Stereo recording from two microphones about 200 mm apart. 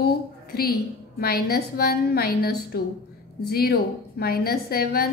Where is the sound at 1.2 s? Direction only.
50° left (ahead or behind).